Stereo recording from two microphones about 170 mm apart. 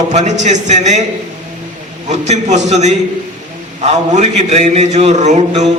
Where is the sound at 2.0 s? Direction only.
45° right (ahead or behind).